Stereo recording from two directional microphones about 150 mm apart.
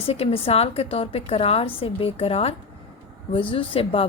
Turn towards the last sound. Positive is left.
turn(degrees=35)  # may be behind; listen again after turning